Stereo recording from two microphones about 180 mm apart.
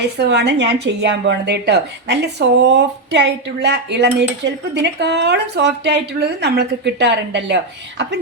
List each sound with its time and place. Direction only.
0.2 s a woman's voice: 70° right (ahead or behind)